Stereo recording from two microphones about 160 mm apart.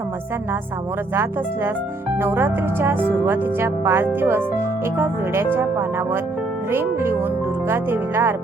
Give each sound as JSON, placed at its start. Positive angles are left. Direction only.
{"t": 1.1, "sound": "speech", "side_deg": -15}